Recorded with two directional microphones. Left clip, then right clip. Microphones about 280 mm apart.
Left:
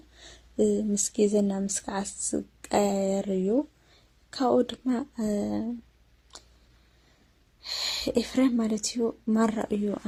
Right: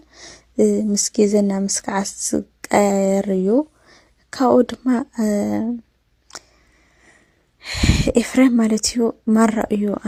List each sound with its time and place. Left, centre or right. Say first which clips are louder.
0.2 s speech: right 9 dB; right
7.6 s a woman's voice: right 8 dB; right